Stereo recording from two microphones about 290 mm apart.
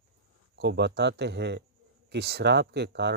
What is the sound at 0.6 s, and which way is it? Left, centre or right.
Speech, right.